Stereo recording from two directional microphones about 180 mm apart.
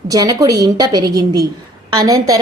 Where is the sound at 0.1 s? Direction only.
20° right (ahead or behind).